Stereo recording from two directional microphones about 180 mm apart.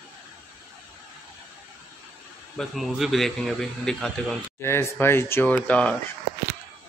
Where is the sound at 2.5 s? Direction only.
Centre (ahead or behind).